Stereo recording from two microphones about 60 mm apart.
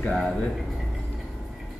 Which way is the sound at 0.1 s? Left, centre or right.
Centre.